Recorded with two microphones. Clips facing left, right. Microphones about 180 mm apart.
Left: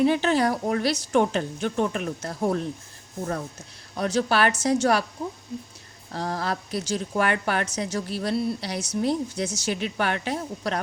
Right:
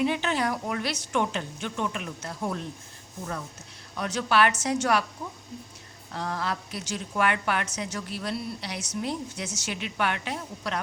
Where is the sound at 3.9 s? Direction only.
35° left (ahead or behind).